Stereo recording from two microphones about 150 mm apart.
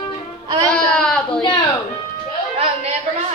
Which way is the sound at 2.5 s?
45° right (ahead or behind).